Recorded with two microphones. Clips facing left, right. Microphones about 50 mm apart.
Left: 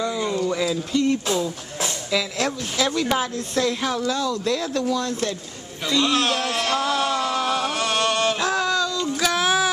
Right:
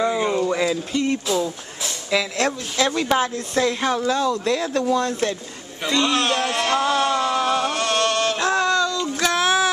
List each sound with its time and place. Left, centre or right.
0.0 s a sound: right
0.7 s speech: centre
2.9 s speech: centre
3.2 s speech: centre
4.1 s speech: centre
4.5 s speech: centre
5.9 s a sound: centre